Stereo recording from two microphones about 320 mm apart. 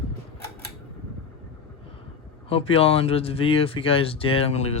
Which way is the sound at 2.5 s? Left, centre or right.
Centre.